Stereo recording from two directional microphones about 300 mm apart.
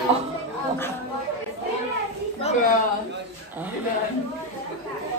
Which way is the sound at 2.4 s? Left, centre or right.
Left.